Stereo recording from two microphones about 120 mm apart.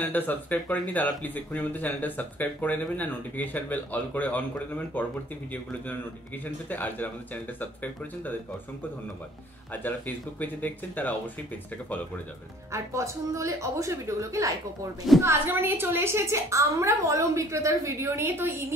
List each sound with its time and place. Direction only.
0.0 s speech: 15° left (ahead or behind)
9.7 s speech: 15° left (ahead or behind)
12.7 s a woman's voice: 25° right (ahead or behind)